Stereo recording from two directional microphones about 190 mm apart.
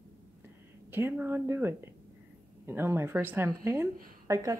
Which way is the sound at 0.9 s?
10° right (ahead or behind).